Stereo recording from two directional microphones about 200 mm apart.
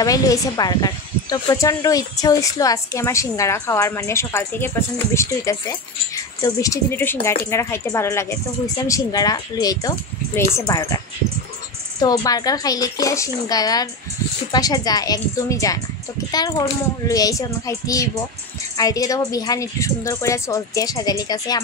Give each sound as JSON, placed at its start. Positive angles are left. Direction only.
{"t": 0.0, "sound": "speech", "side_deg": 20}
{"t": 12.0, "sound": "speech", "side_deg": 20}